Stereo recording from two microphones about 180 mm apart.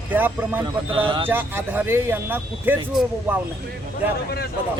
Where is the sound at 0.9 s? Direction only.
30° right (ahead or behind).